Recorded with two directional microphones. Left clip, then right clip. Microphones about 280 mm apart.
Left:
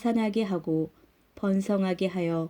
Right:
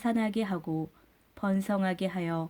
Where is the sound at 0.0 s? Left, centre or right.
Centre.